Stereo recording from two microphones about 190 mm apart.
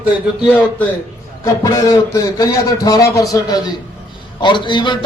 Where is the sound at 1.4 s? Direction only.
15° left (ahead or behind).